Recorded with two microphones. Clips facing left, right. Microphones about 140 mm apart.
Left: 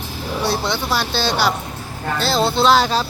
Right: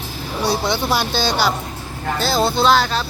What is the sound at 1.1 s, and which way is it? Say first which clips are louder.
Speech: even; centre (ahead or behind).